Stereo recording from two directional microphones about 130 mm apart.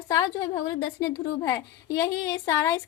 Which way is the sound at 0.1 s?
25° left (ahead or behind).